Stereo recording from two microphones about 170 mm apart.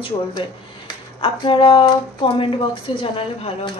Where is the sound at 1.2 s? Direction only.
30° left (ahead or behind).